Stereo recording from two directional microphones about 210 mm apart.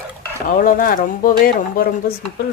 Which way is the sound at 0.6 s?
40° left (ahead or behind).